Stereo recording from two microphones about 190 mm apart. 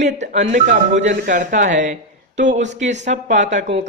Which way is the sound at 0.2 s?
40° right (ahead or behind).